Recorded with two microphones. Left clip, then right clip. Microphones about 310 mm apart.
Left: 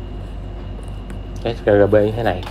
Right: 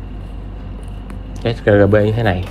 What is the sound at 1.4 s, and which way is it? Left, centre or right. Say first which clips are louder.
Speech: right 2 dB; right.